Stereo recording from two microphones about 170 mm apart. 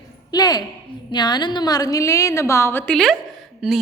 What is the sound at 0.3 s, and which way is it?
A woman's voice, 25° left (ahead or behind).